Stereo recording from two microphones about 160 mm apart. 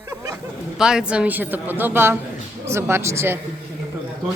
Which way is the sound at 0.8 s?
5° right (ahead or behind).